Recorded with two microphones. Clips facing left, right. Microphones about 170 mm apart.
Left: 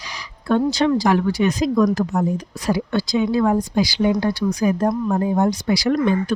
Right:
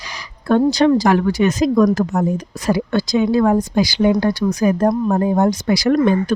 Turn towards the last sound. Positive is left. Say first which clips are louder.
# right 4 dB
turn(degrees=-50)  # may be behind; listen again after turning